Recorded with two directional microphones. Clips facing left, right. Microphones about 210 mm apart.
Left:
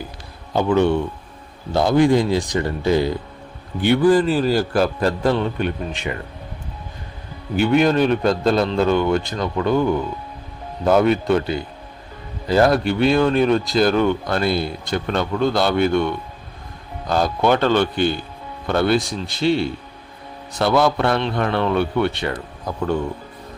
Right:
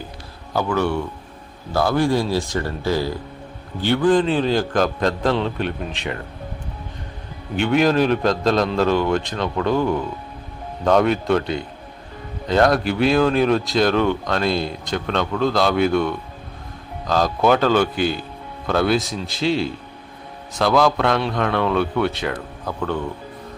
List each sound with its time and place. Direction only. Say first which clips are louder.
0.5 s speech: left 4 dB; 20° left (ahead or behind); by 6.1 s centre (ahead or behind)
7.5 s speech: left 1 dB; centre (ahead or behind)
22.6 s speech: left 3 dB; 15° left (ahead or behind)